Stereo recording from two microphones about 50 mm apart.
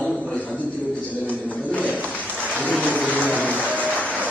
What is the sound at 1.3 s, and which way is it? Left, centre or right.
Speech, left.